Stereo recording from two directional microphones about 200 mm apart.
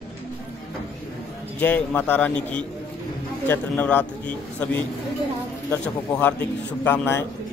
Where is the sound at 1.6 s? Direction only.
10° left (ahead or behind).